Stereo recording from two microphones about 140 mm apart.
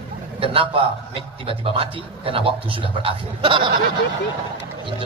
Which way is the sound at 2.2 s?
40° right (ahead or behind).